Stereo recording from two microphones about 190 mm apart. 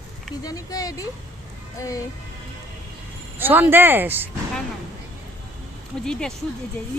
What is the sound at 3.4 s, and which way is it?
Speech, 10° right (ahead or behind).